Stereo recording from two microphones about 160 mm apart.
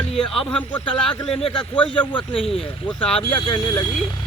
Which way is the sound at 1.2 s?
35° left (ahead or behind).